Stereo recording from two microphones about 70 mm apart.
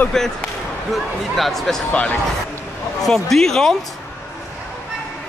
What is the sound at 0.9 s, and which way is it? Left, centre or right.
Speech, centre.